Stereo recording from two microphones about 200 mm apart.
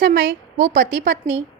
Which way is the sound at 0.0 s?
45° right (ahead or behind).